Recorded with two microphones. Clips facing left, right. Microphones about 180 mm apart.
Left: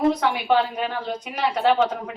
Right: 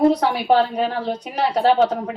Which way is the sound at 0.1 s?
35° right (ahead or behind).